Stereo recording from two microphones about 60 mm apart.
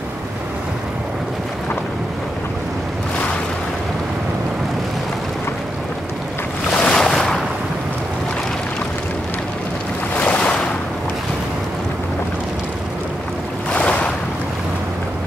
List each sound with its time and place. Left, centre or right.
6.8 s waves: centre
10.1 s waves: left
13.7 s waves: left